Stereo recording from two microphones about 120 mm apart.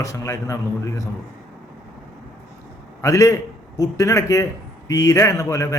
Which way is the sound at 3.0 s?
25° left (ahead or behind).